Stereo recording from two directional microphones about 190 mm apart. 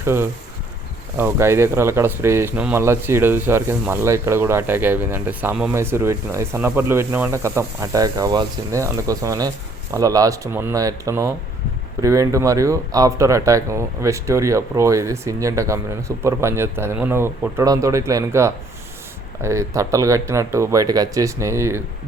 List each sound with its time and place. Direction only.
0.0 s speech: 15° right (ahead or behind)